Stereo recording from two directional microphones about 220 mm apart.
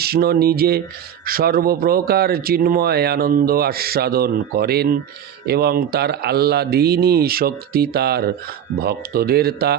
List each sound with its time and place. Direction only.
0.0 s speech: 45° right (ahead or behind)